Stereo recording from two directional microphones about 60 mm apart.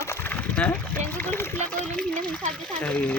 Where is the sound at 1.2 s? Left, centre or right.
Left.